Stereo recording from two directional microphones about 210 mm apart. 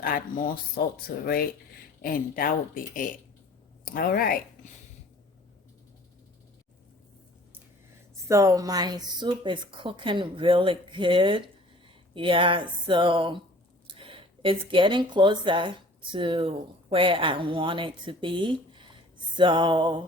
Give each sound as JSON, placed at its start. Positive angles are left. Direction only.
{"t": 0.0, "sound": "speech", "side_deg": 45}
{"t": 8.3, "sound": "a woman's voice", "side_deg": -15}